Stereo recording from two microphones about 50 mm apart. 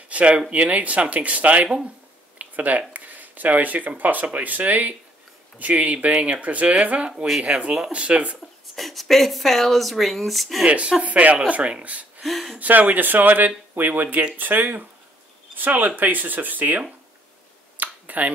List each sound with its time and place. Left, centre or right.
0.1 s a sound: right
0.5 s speech: right
2.3 s a sound: right
2.9 s speech: right
8.7 s speech: centre
10.6 s speech: right
12.2 s speech: centre
12.5 s speech: right
17.7 s a sound: right